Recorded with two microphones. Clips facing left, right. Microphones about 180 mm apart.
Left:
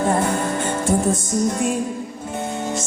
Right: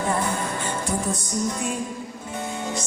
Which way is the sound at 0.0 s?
45° left (ahead or behind).